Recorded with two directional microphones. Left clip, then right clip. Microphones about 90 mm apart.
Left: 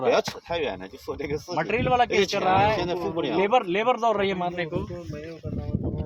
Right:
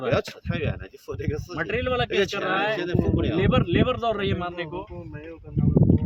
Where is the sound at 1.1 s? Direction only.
55° right (ahead or behind).